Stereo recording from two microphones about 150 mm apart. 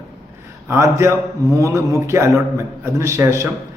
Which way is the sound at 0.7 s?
20° right (ahead or behind).